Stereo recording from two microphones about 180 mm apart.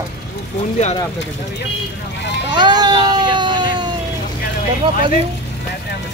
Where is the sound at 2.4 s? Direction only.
25° right (ahead or behind).